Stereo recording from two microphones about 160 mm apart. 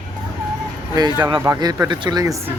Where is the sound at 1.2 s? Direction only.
30° right (ahead or behind).